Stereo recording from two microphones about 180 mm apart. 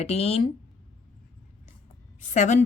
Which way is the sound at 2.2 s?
40° left (ahead or behind).